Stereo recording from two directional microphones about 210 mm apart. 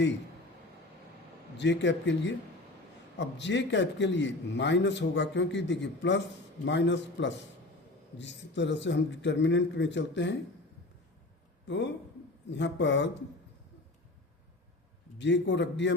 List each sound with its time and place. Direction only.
1.5 s a man's voice: 60° left (ahead or behind)
11.7 s a man's voice: 60° left (ahead or behind)
15.2 s a man's voice: 55° left (ahead or behind)